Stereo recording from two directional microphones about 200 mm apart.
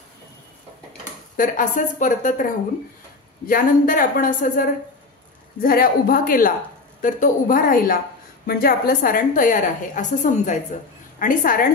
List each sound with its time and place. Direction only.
1.3 s a woman's voice: 40° left (ahead or behind)
3.4 s a woman's voice: 45° left (ahead or behind)